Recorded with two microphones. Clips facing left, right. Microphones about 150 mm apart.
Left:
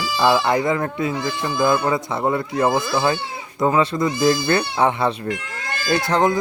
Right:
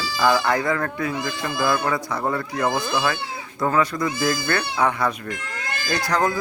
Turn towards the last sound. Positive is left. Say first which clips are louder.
# left 4 dB
turn(degrees=25)  # may be behind; listen again after turning